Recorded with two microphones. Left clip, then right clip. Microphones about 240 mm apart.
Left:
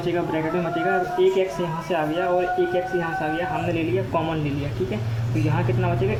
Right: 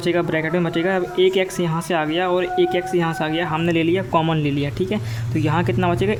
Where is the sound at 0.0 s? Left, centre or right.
Right.